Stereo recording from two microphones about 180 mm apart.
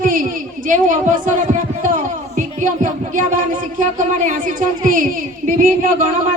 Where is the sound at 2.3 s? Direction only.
45° right (ahead or behind).